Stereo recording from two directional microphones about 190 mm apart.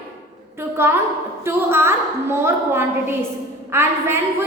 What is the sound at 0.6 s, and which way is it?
A woman's voice, 10° right (ahead or behind).